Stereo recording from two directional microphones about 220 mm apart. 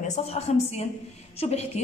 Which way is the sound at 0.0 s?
30° left (ahead or behind).